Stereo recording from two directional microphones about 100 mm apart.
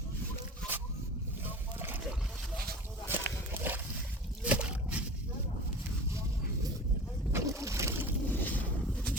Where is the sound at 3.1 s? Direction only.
20° right (ahead or behind).